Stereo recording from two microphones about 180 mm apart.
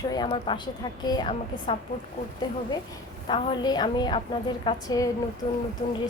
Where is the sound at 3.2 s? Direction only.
25° left (ahead or behind).